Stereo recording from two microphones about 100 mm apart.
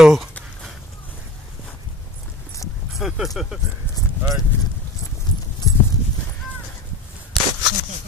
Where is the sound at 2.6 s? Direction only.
35° left (ahead or behind).